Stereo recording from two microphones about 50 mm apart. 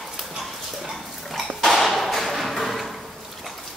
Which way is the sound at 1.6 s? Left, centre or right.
Centre.